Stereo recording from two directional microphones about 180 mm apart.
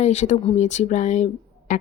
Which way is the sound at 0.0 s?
40° left (ahead or behind).